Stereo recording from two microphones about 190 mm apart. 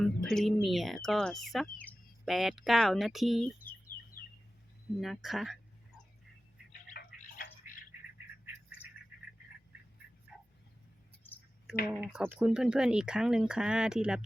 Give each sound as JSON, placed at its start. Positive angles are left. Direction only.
{"t": 0.0, "sound": "speech", "side_deg": 0}
{"t": 4.2, "sound": "bird", "side_deg": 50}
{"t": 4.9, "sound": "speech", "side_deg": 0}
{"t": 6.9, "sound": "a sound", "side_deg": 55}
{"t": 11.9, "sound": "speech", "side_deg": -5}